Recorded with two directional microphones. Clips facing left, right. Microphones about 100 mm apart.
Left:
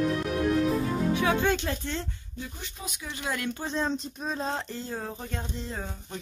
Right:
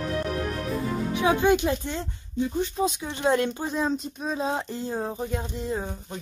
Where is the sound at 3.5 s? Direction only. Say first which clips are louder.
Right 3 dB; 10° right (ahead or behind).